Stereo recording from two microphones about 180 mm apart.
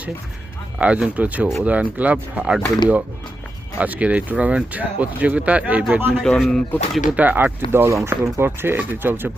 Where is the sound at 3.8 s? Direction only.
10° right (ahead or behind).